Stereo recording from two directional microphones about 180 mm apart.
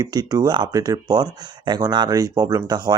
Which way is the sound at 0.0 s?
20° right (ahead or behind).